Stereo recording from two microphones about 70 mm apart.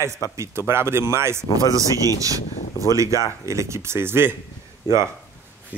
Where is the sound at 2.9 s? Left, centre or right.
Right.